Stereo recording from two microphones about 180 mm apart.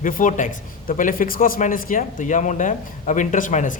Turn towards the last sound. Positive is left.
turn(degrees=45)  # may be behind; listen again after turning